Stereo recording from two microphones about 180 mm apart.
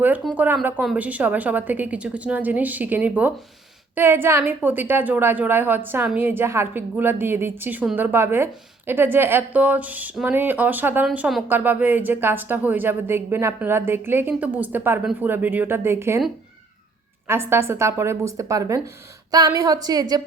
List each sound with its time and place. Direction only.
0.3 s speech: 10° right (ahead or behind)
17.2 s a woman's voice: 15° right (ahead or behind)